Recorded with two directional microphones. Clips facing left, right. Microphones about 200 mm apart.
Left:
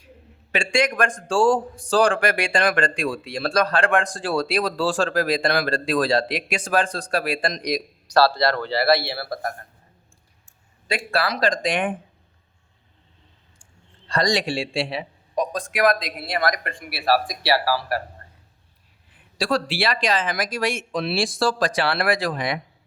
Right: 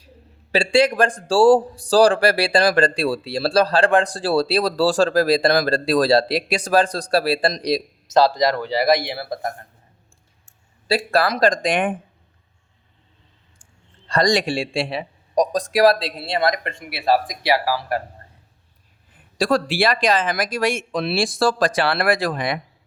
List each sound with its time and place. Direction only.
0.5 s speech: 35° right (ahead or behind)
10.8 s speech: 40° right (ahead or behind)
14.1 s speech: 50° right (ahead or behind); by 18.0 s 20° right (ahead or behind)
19.1 s speech: 45° right (ahead or behind)